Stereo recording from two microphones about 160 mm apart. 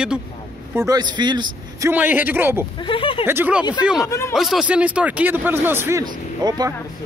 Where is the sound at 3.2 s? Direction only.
10° right (ahead or behind).